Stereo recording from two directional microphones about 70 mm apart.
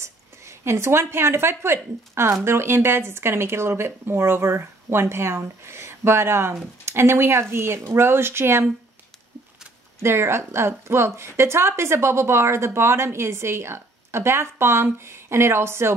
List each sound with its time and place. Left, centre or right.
0.0 s a woman's voice: right
10.0 s a woman's voice: right